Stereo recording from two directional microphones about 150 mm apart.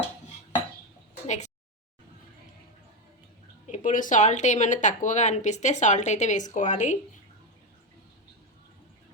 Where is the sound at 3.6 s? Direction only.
55° left (ahead or behind).